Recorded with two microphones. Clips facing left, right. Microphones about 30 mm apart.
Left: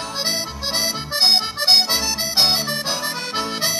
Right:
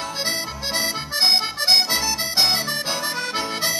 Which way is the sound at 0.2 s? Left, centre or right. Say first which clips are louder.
Left 3 dB; left.